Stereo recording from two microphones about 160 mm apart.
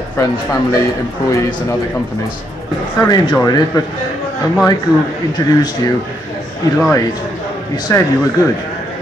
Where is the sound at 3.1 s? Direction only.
25° left (ahead or behind).